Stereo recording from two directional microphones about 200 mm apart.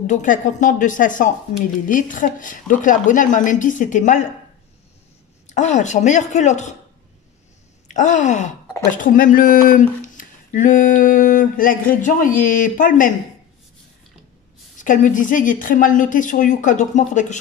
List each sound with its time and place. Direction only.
0.0 s speech: 40° left (ahead or behind)
5.5 s speech: 35° left (ahead or behind)
7.9 s speech: 35° left (ahead or behind)
14.8 s speech: 40° left (ahead or behind)